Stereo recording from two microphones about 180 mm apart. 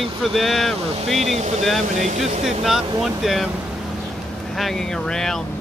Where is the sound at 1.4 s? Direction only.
40° right (ahead or behind).